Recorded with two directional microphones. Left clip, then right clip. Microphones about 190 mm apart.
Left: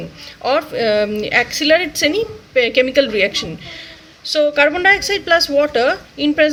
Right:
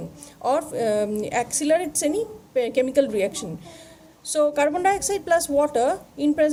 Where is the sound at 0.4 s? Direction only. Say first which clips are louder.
Left 6 dB; 45° right (ahead or behind).